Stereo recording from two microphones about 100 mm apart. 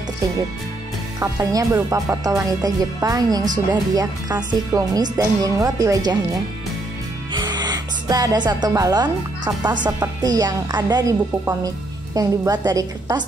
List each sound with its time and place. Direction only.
1.2 s speech: 30° right (ahead or behind)
7.3 s music: 45° right (ahead or behind)
9.9 s a woman's voice: 40° right (ahead or behind)